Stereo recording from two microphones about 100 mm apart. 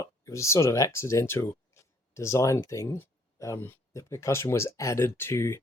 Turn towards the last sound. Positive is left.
turn(degrees=25)  # may be behind; listen again after turning